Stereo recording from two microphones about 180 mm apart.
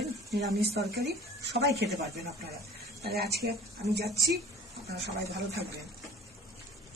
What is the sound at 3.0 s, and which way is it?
Speech, 60° right (ahead or behind).